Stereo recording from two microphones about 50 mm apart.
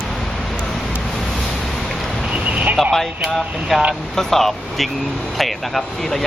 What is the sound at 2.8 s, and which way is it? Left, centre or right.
Speech, centre.